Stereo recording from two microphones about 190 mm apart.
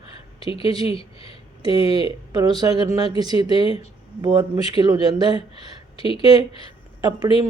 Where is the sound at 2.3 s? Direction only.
20° right (ahead or behind).